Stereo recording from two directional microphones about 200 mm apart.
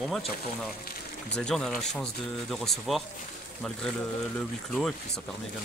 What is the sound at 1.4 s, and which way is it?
Speech, 5° left (ahead or behind).